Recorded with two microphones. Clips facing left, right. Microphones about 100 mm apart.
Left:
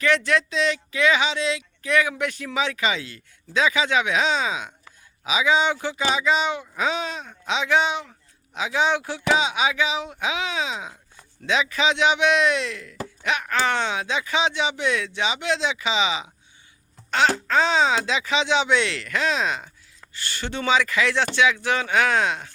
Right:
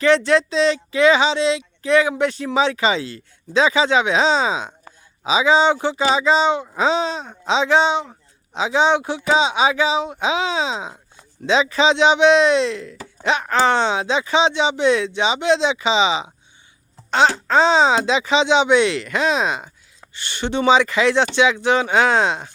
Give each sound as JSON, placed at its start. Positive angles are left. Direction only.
{"t": 0.0, "sound": "speech", "side_deg": -30}